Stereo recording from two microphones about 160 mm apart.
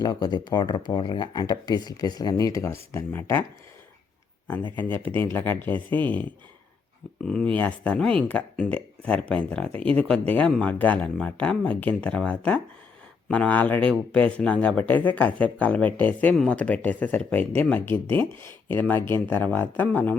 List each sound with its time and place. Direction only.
0.0 s speech: 25° left (ahead or behind)
4.8 s speech: 10° left (ahead or behind)
7.3 s speech: 5° left (ahead or behind)